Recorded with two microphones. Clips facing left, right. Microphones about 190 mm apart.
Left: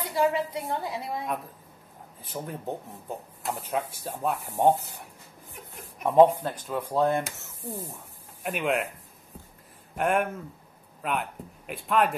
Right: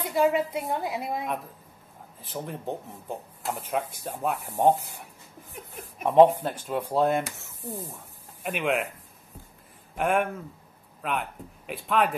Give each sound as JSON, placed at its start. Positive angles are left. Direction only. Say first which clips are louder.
{"t": 0.0, "sound": "a woman's voice", "louder": "right 2 dB", "side_deg": -20}
{"t": 2.2, "sound": "speech", "louder": "right 1 dB", "side_deg": 0}
{"t": 5.9, "sound": "speech", "louder": "right 1 dB", "side_deg": -20}
{"t": 6.7, "sound": "speech", "louder": "right 1 dB", "side_deg": -10}
{"t": 7.9, "sound": "speech", "louder": "even", "side_deg": 0}
{"t": 9.9, "sound": "a man's voice", "louder": "even", "side_deg": 0}